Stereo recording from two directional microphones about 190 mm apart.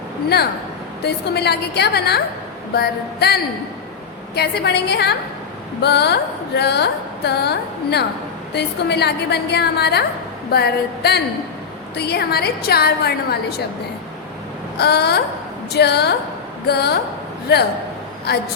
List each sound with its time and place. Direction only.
1.0 s a woman's voice: 60° left (ahead or behind)
14.8 s a woman's voice: 60° left (ahead or behind)